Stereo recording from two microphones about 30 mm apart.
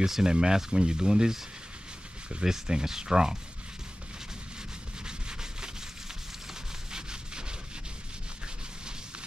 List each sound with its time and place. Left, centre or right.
0.0 s speech: centre
2.4 s speech: centre
5.0 s rub: right